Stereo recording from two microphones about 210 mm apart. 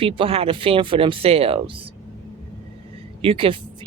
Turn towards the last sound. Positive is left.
turn(degrees=-25)  # may be behind; listen again after turning